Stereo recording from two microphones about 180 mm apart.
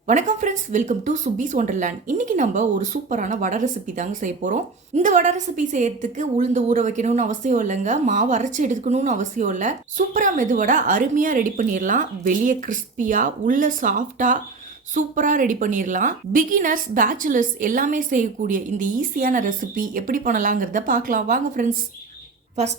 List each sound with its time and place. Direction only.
0.1 s speech: 40° right (ahead or behind)